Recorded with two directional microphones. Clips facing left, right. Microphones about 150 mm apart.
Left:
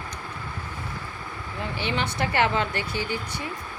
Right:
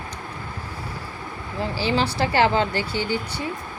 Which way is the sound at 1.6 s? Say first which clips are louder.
Right 6 dB; 30° right (ahead or behind).